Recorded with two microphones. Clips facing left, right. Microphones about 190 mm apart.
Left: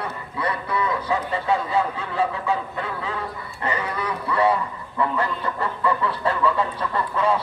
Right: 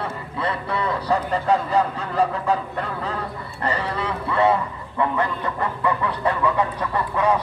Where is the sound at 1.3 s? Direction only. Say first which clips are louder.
Right 2 dB; 40° right (ahead or behind).